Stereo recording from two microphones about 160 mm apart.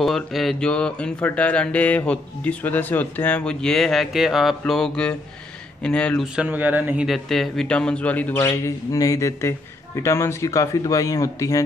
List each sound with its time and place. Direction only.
0.0 s a sound: centre (ahead or behind)
6.3 s speech: 10° right (ahead or behind)
7.1 s a man's voice: centre (ahead or behind)
8.4 s a man's voice: 20° left (ahead or behind)